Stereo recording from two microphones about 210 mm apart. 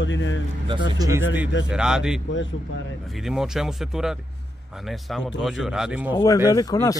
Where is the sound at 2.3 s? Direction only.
65° left (ahead or behind).